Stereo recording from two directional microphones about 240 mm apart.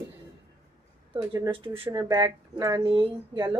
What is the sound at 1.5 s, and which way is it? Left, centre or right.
Speech, right.